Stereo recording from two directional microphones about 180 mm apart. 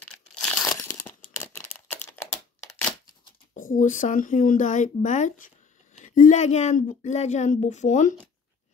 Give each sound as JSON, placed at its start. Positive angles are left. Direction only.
{"t": 0.3, "sound": "crumpling", "side_deg": 5}
{"t": 1.3, "sound": "a sound", "side_deg": 15}
{"t": 3.5, "sound": "a woman's voice", "side_deg": 50}